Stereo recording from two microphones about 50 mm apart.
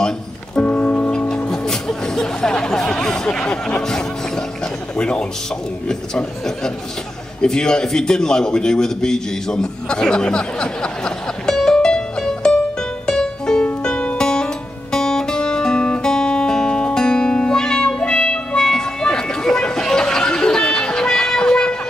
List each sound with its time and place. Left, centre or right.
0.6 s music: left
1.3 s a man's voice: centre
13.0 s music: centre